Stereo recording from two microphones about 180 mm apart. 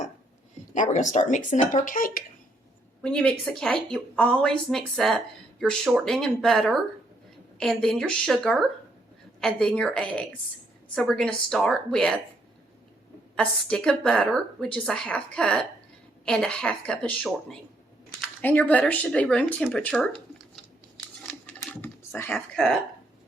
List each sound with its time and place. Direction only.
0.7 s speech: 40° left (ahead or behind)
3.0 s a woman's voice: 5° left (ahead or behind)
13.3 s a woman's voice: 5° left (ahead or behind)
21.2 s typing: 5° left (ahead or behind)